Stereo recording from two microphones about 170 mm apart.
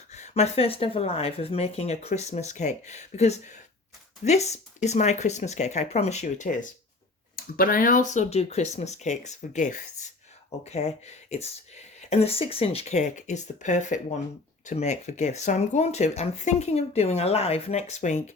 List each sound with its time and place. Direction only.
0.1 s speech: 40° left (ahead or behind)